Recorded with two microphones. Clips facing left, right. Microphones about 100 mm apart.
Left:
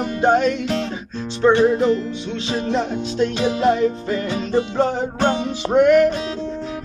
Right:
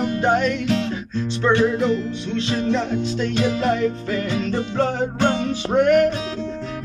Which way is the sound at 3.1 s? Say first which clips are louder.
Left 4 dB; 40° left (ahead or behind).